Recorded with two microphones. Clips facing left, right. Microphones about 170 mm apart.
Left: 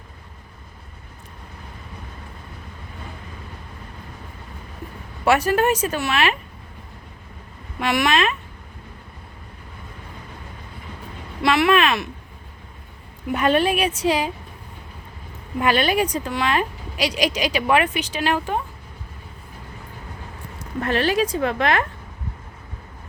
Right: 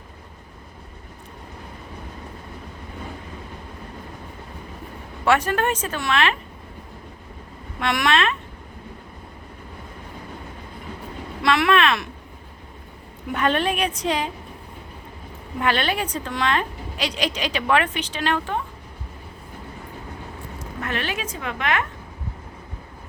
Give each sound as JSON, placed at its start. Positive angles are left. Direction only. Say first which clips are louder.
{"t": 5.2, "sound": "a woman's voice", "louder": "left 2 dB", "side_deg": 10}
{"t": 7.8, "sound": "speech", "louder": "left 1 dB", "side_deg": 5}
{"t": 11.4, "sound": "a sound", "louder": "left 1 dB", "side_deg": 5}
{"t": 13.3, "sound": "a woman's voice", "louder": "left 3 dB", "side_deg": 10}
{"t": 15.6, "sound": "a woman's voice", "louder": "left 4 dB", "side_deg": 10}
{"t": 20.8, "sound": "a woman's voice", "louder": "left 8 dB", "side_deg": 35}